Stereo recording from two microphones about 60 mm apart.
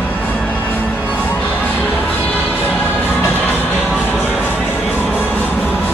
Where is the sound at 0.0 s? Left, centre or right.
Left.